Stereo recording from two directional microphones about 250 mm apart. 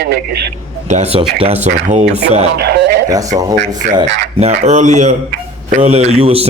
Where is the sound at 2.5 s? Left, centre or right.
Right.